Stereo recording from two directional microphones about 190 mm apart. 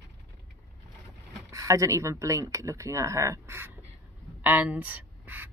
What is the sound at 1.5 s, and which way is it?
Speech, 15° right (ahead or behind).